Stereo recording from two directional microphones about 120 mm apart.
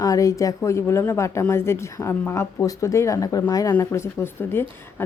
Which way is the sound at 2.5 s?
30° left (ahead or behind).